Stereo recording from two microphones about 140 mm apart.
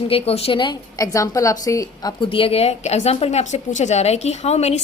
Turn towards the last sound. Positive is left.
turn(degrees=50)  # may be behind; listen again after turning